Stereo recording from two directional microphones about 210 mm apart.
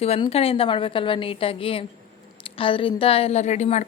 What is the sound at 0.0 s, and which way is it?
A woman's voice, 30° left (ahead or behind).